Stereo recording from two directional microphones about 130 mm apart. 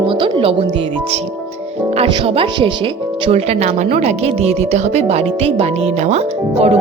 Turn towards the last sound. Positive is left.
turn(degrees=-55)  # may be behind; listen again after turning